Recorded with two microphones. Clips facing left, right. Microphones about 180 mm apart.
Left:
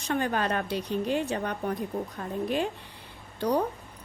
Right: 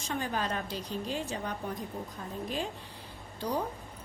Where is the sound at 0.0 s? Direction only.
65° left (ahead or behind).